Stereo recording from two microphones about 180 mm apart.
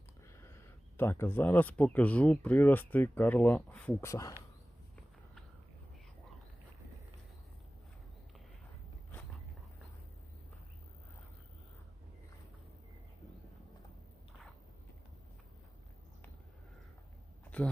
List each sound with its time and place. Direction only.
0.3 s speech: 15° left (ahead or behind)
4.1 s speech: 20° left (ahead or behind)